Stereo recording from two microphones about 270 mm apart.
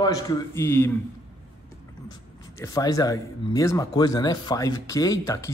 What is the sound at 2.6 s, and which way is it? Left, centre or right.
Speech, centre.